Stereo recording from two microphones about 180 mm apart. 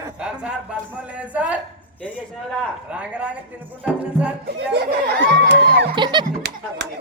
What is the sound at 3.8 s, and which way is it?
Music, 5° right (ahead or behind).